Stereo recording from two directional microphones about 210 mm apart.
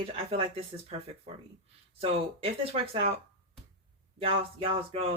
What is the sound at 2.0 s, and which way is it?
Speech, 30° right (ahead or behind).